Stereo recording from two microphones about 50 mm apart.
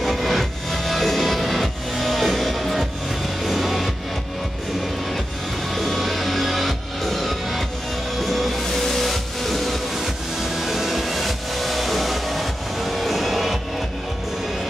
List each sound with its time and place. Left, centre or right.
0.0 s music: centre
5.7 s music: centre